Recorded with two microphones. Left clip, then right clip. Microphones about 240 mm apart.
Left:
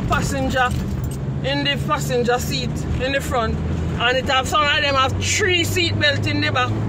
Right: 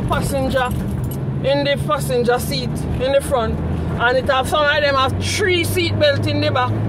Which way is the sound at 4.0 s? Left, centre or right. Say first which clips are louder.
Right 2 dB; centre.